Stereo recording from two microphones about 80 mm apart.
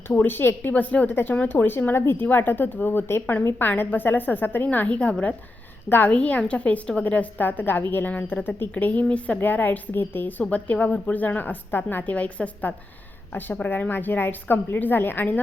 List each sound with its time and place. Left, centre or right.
0.1 s a woman's voice: left